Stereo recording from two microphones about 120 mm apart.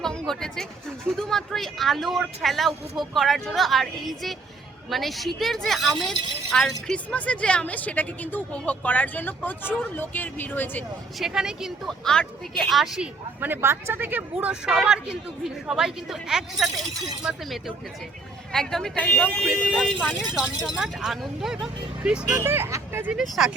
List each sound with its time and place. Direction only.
0.0 s a sound: 5° left (ahead or behind)
1.1 s speech: 5° left (ahead or behind)
11.2 s speech: 5° right (ahead or behind)
13.4 s speech: 20° right (ahead or behind); by 16.8 s centre (ahead or behind)
18.5 s speech: 5° left (ahead or behind)
22.4 s speech: 20° right (ahead or behind)
23.1 s speech: centre (ahead or behind)